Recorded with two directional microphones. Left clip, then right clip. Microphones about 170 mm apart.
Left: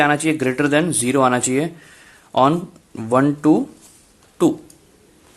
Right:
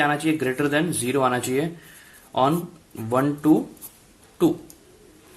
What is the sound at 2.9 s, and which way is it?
Speech, 45° left (ahead or behind).